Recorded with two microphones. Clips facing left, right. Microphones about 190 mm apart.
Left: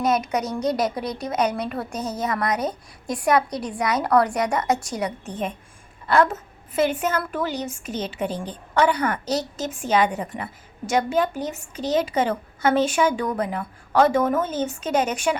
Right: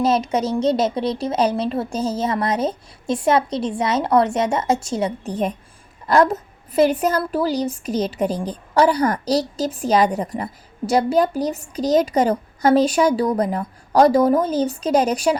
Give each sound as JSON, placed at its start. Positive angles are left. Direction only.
{"t": 0.0, "sound": "a woman's voice", "side_deg": -30}